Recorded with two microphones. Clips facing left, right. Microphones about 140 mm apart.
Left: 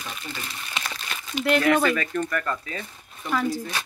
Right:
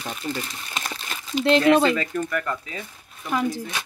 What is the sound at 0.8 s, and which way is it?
Crumpling, 45° right (ahead or behind).